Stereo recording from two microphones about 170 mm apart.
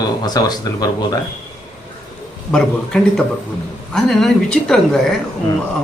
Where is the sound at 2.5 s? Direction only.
5° left (ahead or behind).